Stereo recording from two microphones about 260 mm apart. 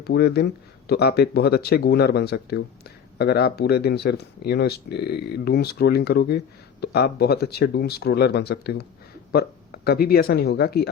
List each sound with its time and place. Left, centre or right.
0.0 s speech: left